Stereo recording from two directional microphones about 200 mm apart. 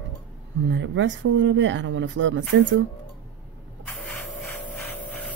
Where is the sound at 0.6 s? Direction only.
70° right (ahead or behind).